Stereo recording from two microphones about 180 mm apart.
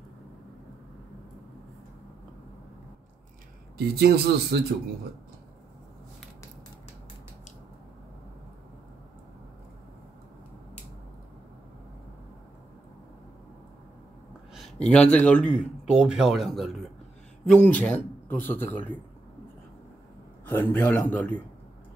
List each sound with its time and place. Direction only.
3.7 s speech: 60° right (ahead or behind)
14.5 s a man's voice: 5° left (ahead or behind)
20.4 s speech: 10° left (ahead or behind)